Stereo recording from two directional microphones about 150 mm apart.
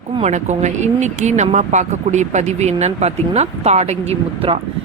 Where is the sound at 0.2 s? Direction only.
50° right (ahead or behind).